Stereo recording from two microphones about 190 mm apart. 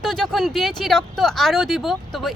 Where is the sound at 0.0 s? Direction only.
Centre (ahead or behind).